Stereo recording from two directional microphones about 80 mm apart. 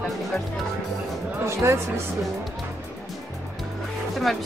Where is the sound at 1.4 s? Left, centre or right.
Right.